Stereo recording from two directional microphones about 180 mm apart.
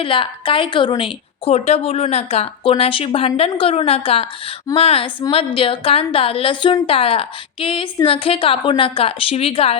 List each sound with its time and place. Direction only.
0.0 s a woman's voice: 30° left (ahead or behind)